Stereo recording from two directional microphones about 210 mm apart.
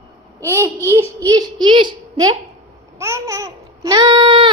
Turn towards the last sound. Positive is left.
turn(degrees=-25)  # may be behind; listen again after turning